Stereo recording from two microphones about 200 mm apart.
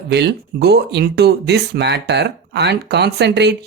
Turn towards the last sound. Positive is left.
turn(degrees=-60)  # may be behind; listen again after turning